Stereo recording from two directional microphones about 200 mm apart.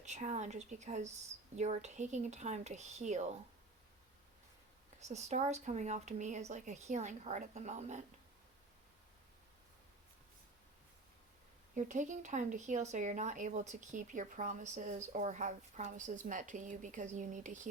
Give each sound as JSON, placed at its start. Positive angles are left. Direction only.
{"t": 0.0, "sound": "speech", "side_deg": -35}
{"t": 4.9, "sound": "speech", "side_deg": -35}
{"t": 11.7, "sound": "speech", "side_deg": -40}